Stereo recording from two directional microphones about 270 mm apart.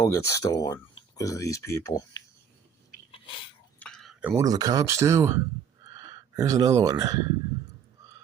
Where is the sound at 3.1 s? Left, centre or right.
Centre.